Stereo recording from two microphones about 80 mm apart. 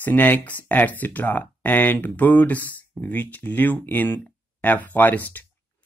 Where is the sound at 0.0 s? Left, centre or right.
Left.